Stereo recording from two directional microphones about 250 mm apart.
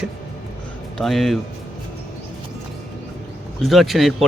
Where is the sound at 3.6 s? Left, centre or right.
Centre.